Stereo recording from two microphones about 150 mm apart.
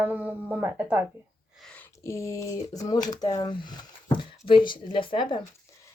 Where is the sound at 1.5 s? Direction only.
5° left (ahead or behind); by 5.4 s 30° left (ahead or behind).